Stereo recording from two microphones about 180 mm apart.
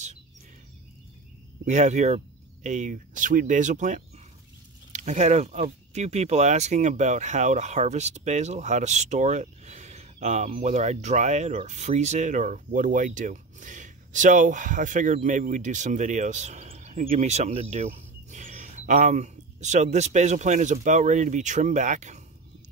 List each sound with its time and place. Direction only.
1.6 s speech: 40° right (ahead or behind)